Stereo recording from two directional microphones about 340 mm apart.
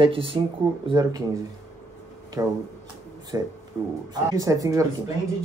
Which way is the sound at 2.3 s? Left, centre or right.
Centre.